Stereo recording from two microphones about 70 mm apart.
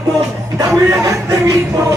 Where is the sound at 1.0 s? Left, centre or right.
Right.